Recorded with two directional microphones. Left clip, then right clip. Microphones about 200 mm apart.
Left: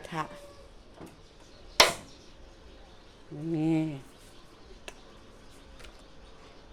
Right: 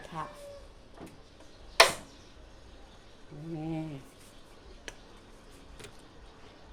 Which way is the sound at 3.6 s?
50° left (ahead or behind).